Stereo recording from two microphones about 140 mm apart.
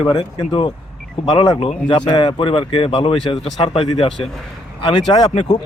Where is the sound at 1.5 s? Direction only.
45° left (ahead or behind).